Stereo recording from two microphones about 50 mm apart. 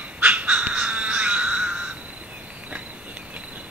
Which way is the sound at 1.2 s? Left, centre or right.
Right.